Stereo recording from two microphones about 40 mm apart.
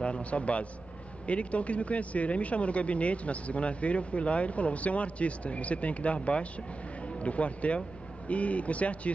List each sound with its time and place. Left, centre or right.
0.0 s a man's voice: left